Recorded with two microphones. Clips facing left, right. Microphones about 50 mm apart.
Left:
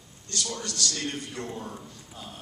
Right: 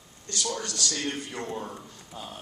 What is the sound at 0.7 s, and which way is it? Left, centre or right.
A man's voice, right.